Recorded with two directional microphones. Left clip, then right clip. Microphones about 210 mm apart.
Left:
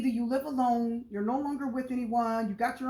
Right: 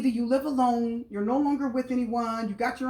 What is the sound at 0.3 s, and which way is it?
Speech, 20° left (ahead or behind).